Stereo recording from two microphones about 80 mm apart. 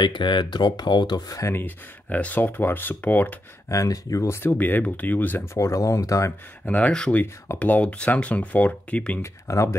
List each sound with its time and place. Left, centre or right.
0.0 s speech: left
1.5 s speech: left
3.6 s speech: left
4.4 s speech: left
6.7 s speech: centre
9.2 s speech: left